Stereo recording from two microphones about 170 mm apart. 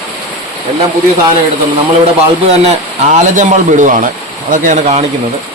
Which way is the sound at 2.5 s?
40° right (ahead or behind).